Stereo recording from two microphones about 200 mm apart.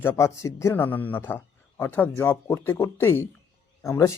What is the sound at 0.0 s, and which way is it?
Speech, 10° left (ahead or behind).